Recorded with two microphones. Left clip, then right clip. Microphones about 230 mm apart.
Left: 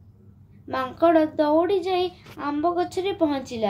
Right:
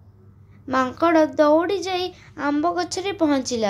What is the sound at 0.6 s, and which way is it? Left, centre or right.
A woman's voice, right.